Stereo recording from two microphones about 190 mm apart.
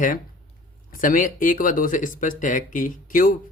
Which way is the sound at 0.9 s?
45° left (ahead or behind).